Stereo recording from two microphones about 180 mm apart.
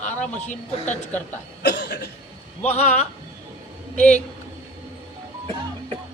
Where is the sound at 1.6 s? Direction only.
70° left (ahead or behind).